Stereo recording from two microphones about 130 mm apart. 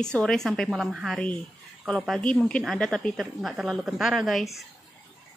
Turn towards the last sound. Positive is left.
turn(degrees=0)  # may be behind; listen again after turning